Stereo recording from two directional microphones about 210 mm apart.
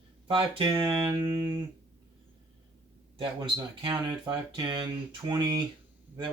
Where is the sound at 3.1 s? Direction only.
25° right (ahead or behind).